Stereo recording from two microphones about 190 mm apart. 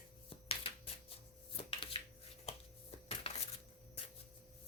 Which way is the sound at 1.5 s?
30° left (ahead or behind).